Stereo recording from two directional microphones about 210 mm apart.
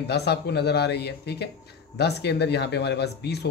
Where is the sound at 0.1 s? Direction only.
50° left (ahead or behind).